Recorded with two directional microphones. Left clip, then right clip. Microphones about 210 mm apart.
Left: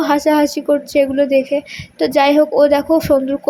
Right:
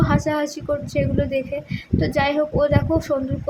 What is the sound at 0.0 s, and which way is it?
A woman's voice, 25° left (ahead or behind).